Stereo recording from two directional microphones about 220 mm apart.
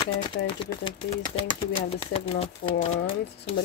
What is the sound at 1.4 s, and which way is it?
Speech, 20° left (ahead or behind).